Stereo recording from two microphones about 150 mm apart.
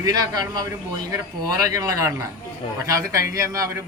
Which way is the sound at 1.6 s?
20° right (ahead or behind).